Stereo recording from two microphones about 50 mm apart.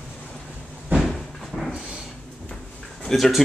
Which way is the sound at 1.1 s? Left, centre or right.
Centre.